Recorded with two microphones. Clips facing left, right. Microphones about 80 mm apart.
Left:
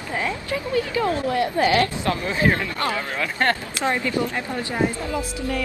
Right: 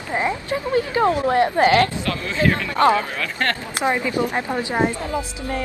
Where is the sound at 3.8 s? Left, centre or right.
Centre.